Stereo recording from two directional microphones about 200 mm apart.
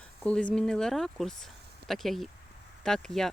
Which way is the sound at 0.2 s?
5° left (ahead or behind).